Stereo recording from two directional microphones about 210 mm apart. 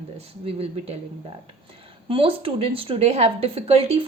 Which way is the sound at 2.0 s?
25° right (ahead or behind).